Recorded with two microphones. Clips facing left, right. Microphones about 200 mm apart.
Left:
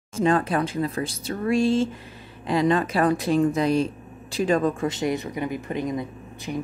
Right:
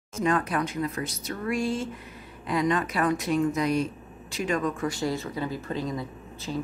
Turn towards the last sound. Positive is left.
turn(degrees=15)  # may be behind; listen again after turning